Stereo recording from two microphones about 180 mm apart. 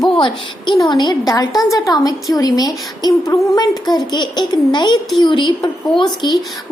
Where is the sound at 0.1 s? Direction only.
25° left (ahead or behind).